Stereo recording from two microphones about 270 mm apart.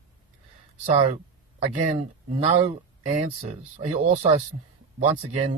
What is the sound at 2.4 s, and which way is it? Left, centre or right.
Speech, right.